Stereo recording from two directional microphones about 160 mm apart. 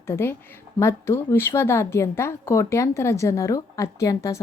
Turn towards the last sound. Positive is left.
turn(degrees=20)  # may be behind; listen again after turning